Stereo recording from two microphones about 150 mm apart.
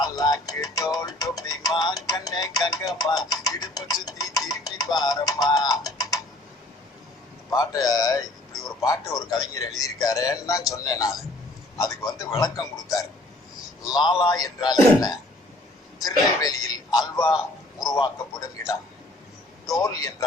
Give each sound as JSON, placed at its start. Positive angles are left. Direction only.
{"t": 0.0, "sound": "music", "side_deg": 25}
{"t": 2.0, "sound": "speech", "side_deg": 25}
{"t": 4.0, "sound": "music", "side_deg": 25}
{"t": 7.5, "sound": "a man's voice", "side_deg": 25}
{"t": 14.2, "sound": "a man's voice", "side_deg": 25}